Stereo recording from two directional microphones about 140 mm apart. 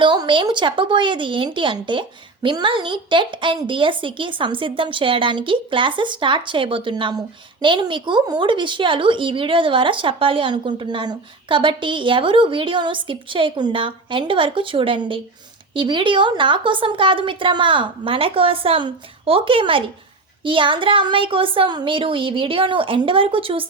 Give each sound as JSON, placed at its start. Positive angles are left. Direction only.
{"t": 0.0, "sound": "speech", "side_deg": -35}